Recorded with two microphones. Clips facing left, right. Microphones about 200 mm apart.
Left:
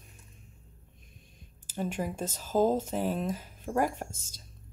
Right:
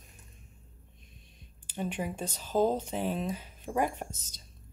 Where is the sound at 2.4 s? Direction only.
5° left (ahead or behind).